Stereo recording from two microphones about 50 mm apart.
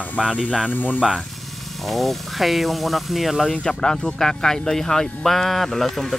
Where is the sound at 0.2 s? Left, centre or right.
Centre.